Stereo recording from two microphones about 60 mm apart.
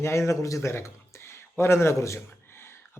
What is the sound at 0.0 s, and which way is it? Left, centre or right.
Speech, left.